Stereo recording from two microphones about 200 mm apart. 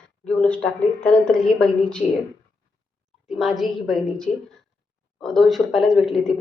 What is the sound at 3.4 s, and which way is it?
A woman's voice, centre (ahead or behind).